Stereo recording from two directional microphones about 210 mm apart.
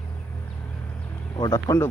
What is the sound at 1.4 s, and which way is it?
Speech, 15° left (ahead or behind).